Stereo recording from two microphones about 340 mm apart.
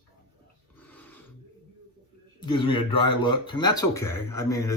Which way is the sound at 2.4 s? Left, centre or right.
Centre.